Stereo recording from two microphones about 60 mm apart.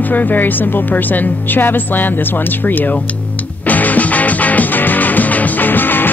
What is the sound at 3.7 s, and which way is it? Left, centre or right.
Music, left.